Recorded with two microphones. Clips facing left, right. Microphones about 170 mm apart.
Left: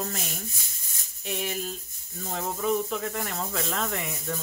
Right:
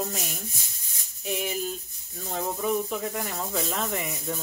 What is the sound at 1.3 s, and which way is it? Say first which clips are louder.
Speech: right 2 dB; 5° right (ahead or behind).